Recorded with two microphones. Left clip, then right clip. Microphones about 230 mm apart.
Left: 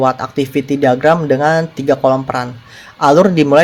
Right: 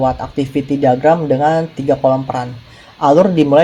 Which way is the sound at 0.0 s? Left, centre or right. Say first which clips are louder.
Left 2 dB; left.